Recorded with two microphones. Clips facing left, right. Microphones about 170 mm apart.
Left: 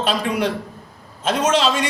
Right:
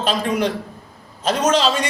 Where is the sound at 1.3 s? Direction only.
5° left (ahead or behind).